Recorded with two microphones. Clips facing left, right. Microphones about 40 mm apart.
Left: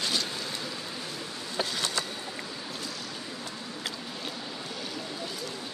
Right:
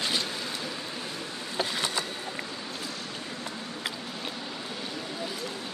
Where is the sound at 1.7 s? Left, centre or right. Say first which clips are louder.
Right 1 dB; centre.